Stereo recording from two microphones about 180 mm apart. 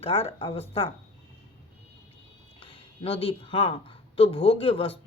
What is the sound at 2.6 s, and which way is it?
Speech, 30° left (ahead or behind).